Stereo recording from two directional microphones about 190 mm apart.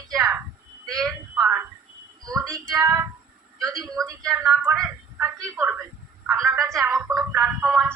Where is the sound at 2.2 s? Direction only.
20° right (ahead or behind).